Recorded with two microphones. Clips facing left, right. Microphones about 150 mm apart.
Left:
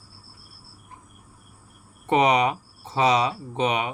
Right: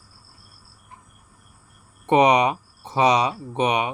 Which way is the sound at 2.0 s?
15° right (ahead or behind).